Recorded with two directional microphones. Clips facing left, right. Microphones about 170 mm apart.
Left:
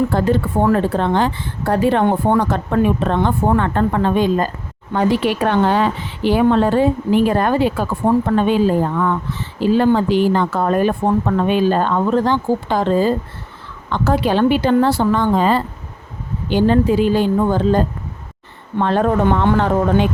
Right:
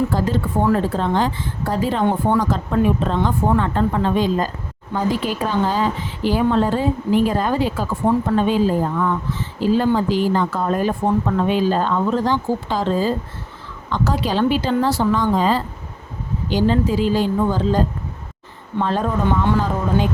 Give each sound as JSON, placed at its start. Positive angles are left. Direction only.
{"t": 0.1, "sound": "a woman's voice", "side_deg": 60}
{"t": 4.9, "sound": "speech", "side_deg": 70}
{"t": 8.1, "sound": "speech", "side_deg": 50}
{"t": 8.4, "sound": "a woman's voice", "side_deg": 60}